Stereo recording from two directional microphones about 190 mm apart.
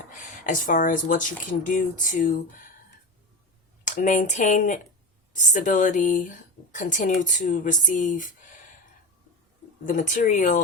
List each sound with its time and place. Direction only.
0.1 s speech: 45° left (ahead or behind)
3.8 s speech: 40° left (ahead or behind)
9.8 s speech: 45° left (ahead or behind)